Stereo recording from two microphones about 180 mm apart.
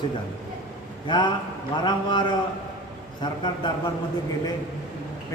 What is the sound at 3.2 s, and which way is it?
Speech, 25° left (ahead or behind).